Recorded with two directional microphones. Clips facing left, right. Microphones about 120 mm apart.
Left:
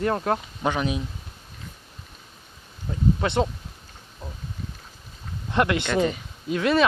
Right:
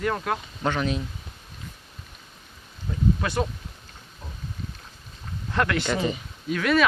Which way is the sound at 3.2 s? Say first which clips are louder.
Left 3 dB; 25° left (ahead or behind).